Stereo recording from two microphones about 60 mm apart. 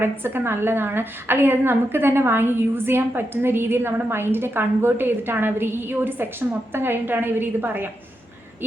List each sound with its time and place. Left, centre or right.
0.0 s a woman's voice: right